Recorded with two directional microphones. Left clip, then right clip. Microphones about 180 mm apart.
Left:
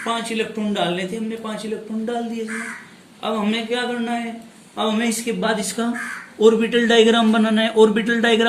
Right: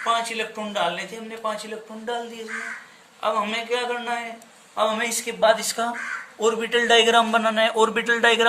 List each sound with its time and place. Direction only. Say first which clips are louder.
0.0 s a man's voice: even; 30° right (ahead or behind)
2.0 s a man's voice: left 3 dB; 35° right (ahead or behind)